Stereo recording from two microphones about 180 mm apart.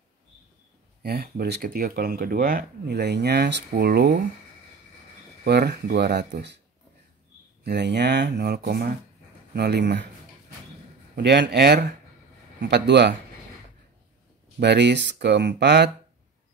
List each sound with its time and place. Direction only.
1.0 s speech: 60° right (ahead or behind)
5.4 s speech: 65° right (ahead or behind)
7.6 s speech: 70° right (ahead or behind)
11.1 s speech: 70° right (ahead or behind)
14.6 s speech: 70° right (ahead or behind)